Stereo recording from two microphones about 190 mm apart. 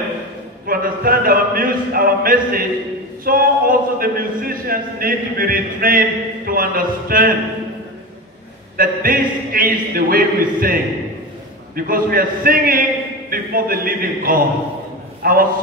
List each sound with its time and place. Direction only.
0.7 s a man's voice: 50° right (ahead or behind)
8.7 s a man's voice: 50° right (ahead or behind)